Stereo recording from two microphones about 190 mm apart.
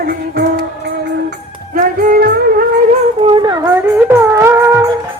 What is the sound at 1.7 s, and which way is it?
Music, 50° right (ahead or behind).